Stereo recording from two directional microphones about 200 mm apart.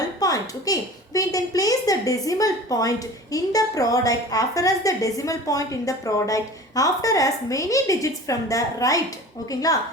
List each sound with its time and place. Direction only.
0.2 s a woman's voice: 20° left (ahead or behind)